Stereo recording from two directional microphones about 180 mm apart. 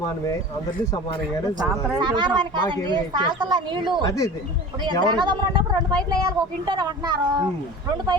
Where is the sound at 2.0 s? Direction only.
25° right (ahead or behind).